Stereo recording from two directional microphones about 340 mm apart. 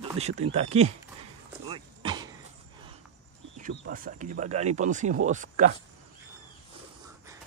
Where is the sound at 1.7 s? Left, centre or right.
Centre.